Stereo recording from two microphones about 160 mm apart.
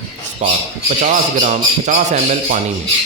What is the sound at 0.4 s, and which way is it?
A man's voice, 45° right (ahead or behind).